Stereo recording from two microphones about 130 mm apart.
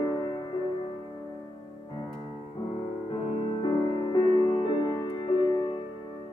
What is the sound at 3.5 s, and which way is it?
Music, 35° left (ahead or behind).